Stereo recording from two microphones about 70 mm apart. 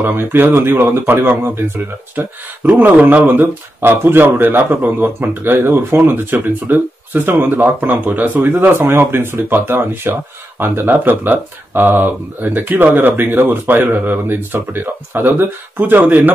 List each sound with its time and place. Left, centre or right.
0.0 s speech: right